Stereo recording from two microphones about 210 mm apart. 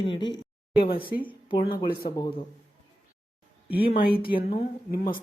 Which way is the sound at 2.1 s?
20° left (ahead or behind).